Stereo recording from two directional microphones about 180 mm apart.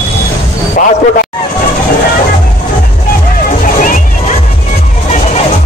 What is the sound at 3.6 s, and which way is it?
Music, 50° left (ahead or behind).